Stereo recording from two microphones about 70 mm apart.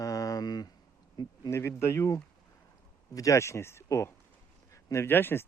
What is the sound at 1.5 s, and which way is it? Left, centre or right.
A man's voice, left.